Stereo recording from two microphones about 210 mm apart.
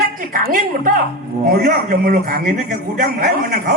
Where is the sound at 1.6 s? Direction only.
40° right (ahead or behind).